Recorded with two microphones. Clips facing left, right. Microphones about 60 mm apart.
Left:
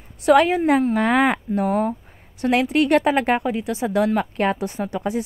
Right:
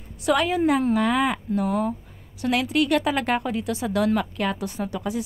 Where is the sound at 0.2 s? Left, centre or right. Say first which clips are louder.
Left 6 dB; left.